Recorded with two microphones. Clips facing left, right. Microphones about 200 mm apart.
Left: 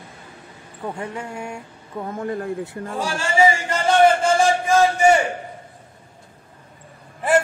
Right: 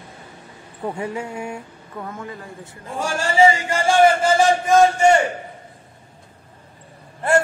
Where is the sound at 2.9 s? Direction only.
45° right (ahead or behind).